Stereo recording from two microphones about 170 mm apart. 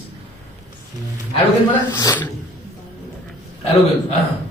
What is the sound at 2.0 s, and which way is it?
Speech, 20° left (ahead or behind).